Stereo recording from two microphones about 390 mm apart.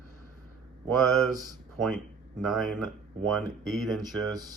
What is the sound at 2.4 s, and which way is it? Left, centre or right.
Speech, centre.